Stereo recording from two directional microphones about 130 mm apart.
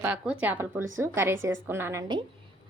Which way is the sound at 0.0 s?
10° right (ahead or behind).